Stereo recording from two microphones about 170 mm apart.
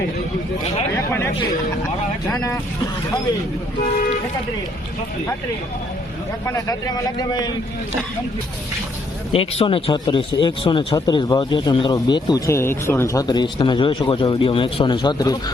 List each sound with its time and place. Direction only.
0.9 s chatter: 15° left (ahead or behind)
6.4 s speech: 20° left (ahead or behind)
9.3 s speech: 35° left (ahead or behind)